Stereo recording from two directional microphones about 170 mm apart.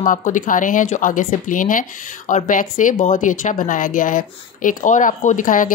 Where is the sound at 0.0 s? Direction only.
50° left (ahead or behind).